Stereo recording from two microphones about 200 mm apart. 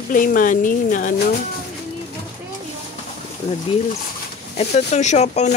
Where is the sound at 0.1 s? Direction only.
45° left (ahead or behind).